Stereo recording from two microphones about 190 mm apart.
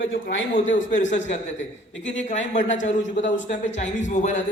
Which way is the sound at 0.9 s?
40° left (ahead or behind).